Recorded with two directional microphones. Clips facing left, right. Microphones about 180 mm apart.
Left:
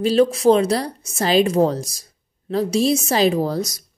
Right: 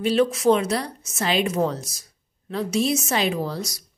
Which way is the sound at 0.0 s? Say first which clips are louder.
Left 4 dB; 35° left (ahead or behind).